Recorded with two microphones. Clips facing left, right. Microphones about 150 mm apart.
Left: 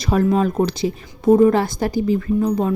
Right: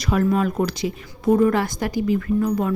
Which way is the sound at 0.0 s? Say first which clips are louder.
Left 3 dB; 25° left (ahead or behind).